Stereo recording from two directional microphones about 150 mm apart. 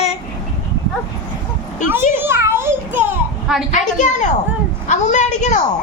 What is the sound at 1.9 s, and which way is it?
Children playing, 15° right (ahead or behind).